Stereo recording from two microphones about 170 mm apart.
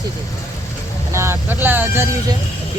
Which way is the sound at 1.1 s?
15° right (ahead or behind).